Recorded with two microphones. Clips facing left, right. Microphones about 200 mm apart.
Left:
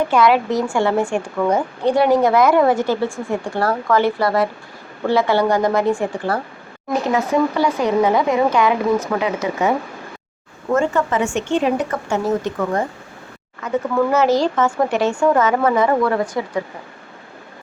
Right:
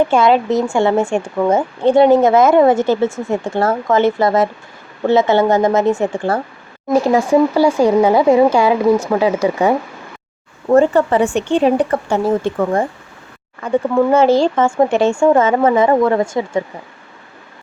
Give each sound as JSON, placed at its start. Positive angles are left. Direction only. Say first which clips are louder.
{"t": 0.1, "sound": "a woman's voice", "louder": "right 3 dB", "side_deg": -25}